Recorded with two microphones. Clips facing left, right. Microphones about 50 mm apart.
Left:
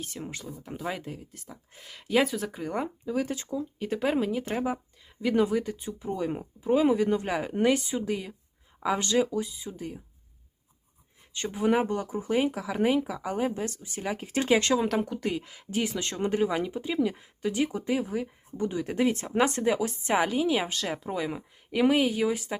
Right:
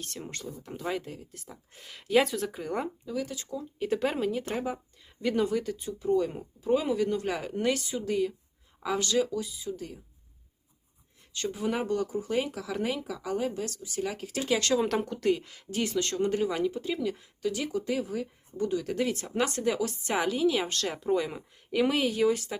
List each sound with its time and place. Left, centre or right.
0.0 s speech: centre
3.1 s speech: left
3.6 s speech: centre
4.5 s a woman's voice: centre
8.0 s a woman's voice: centre
11.3 s a woman's voice: left
14.8 s a woman's voice: centre